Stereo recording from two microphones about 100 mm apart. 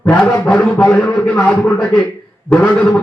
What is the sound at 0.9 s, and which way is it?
A man's voice, 10° left (ahead or behind).